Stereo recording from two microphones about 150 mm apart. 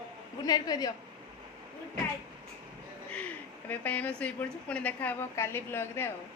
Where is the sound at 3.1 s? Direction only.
10° left (ahead or behind).